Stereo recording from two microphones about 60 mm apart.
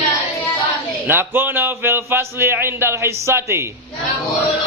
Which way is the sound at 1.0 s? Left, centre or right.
Right.